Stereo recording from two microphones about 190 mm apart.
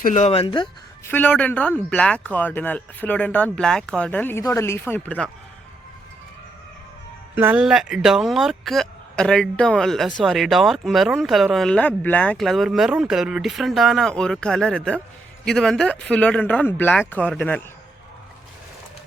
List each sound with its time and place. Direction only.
0.0 s speech: 40° left (ahead or behind)
1.0 s speech: 10° left (ahead or behind)
7.3 s speech: 10° right (ahead or behind); by 17.6 s 5° left (ahead or behind)